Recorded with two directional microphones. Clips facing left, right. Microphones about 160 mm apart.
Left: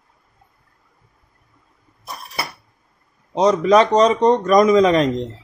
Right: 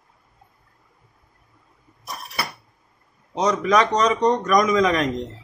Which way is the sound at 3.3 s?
30° left (ahead or behind).